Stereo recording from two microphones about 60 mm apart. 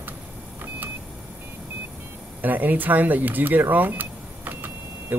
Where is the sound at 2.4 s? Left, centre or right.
Right.